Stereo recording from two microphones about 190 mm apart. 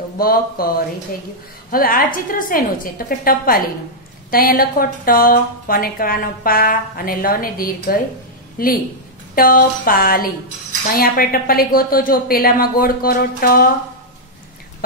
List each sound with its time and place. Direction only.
0.2 s a woman's voice: 50° left (ahead or behind)